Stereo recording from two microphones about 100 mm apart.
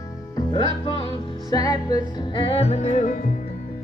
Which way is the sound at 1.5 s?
40° left (ahead or behind).